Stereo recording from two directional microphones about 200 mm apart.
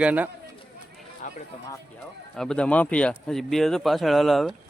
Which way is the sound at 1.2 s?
40° left (ahead or behind).